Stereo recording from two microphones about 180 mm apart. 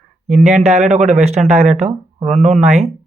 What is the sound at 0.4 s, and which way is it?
Speech, 35° right (ahead or behind).